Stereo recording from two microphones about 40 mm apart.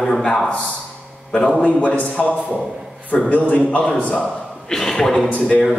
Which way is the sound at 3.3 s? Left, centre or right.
Left.